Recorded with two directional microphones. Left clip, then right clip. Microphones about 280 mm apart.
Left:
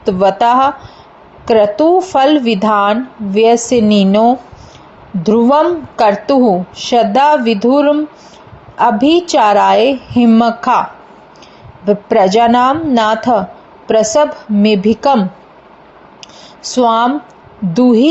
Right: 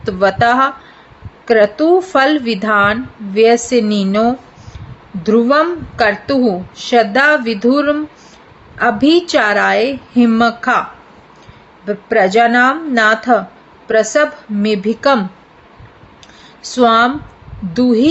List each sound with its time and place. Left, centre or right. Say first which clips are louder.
0.2 s a woman's voice: left 1 dB; centre
9.0 s a woman's voice: left 1 dB; centre
11.9 s a woman's voice: left 3 dB; centre
16.7 s a woman's voice: even; centre